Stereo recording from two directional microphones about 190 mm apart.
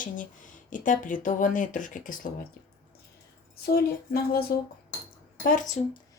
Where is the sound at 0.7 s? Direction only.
45° left (ahead or behind).